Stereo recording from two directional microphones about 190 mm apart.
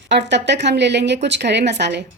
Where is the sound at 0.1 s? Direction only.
65° right (ahead or behind).